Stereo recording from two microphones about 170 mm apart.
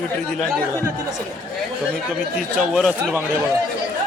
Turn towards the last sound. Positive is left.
turn(degrees=0)  # may be behind; listen again after turning